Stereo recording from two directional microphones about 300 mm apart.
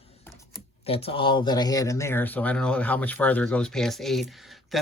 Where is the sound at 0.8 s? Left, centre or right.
Centre.